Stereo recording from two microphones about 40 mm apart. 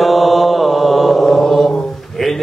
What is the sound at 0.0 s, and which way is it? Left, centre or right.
Mantra, centre.